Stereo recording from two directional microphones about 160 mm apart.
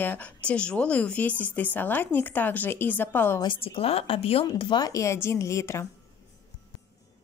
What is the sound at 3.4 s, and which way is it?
A woman's voice, 35° left (ahead or behind).